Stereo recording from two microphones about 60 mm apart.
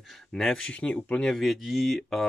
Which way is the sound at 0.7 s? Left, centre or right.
Left.